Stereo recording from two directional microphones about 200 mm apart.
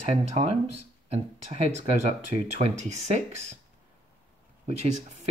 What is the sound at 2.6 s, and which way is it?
Speech, 35° right (ahead or behind).